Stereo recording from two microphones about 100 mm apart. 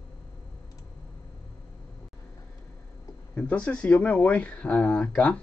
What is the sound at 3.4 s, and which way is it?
Speech, 10° left (ahead or behind).